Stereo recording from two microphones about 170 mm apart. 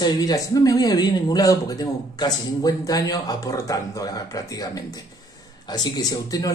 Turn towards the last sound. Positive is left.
turn(degrees=20)  # may be behind; listen again after turning